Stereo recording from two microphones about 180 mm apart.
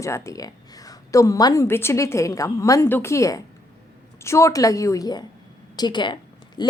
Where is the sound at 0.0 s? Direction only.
15° left (ahead or behind).